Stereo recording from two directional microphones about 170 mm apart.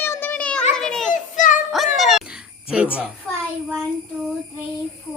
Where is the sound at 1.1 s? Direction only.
50° left (ahead or behind).